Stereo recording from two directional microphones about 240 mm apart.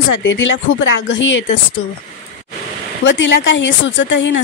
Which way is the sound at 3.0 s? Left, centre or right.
Left.